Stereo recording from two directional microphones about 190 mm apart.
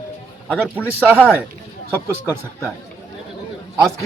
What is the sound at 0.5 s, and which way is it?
Speech, 10° right (ahead or behind).